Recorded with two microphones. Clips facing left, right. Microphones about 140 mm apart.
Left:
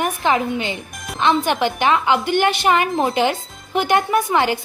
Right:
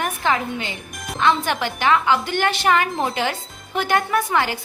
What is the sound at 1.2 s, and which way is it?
A woman's voice, 20° left (ahead or behind).